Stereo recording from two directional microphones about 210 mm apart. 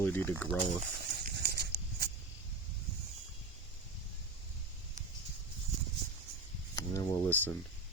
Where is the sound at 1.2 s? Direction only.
50° right (ahead or behind).